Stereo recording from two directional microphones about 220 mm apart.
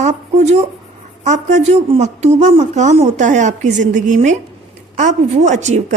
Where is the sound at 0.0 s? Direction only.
30° right (ahead or behind).